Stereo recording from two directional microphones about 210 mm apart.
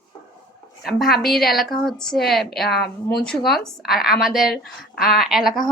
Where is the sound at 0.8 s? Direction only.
Centre (ahead or behind).